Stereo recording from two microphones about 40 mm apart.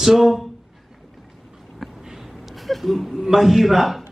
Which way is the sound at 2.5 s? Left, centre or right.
Centre.